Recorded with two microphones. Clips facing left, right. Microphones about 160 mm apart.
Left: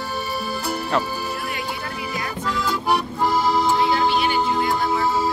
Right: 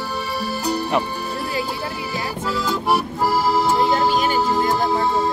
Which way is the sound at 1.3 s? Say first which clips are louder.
Right 4 dB; 30° right (ahead or behind).